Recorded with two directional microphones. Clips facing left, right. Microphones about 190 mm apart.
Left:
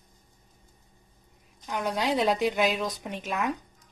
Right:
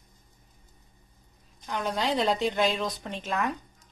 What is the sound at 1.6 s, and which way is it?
A woman's voice, 10° left (ahead or behind).